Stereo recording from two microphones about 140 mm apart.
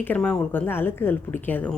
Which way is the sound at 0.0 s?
10° left (ahead or behind).